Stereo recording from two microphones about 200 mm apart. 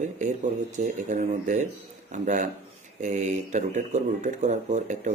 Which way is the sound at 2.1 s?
35° right (ahead or behind).